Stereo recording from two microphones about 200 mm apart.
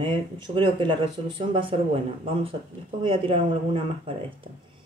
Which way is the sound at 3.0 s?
25° right (ahead or behind).